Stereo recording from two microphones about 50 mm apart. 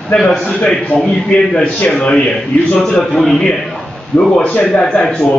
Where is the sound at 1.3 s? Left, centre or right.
Left; by 3.5 s centre.